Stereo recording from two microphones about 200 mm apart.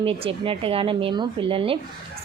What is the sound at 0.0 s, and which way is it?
Speech, 30° right (ahead or behind).